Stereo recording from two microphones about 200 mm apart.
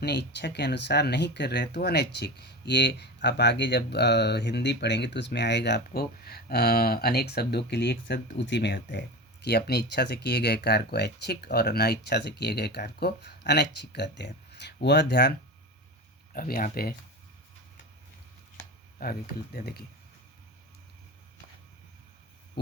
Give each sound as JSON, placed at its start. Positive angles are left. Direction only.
{"t": 0.0, "sound": "speech", "side_deg": 55}
{"t": 16.3, "sound": "speech", "side_deg": 45}
{"t": 19.0, "sound": "speech", "side_deg": 50}
{"t": 22.6, "sound": "a sound", "side_deg": 60}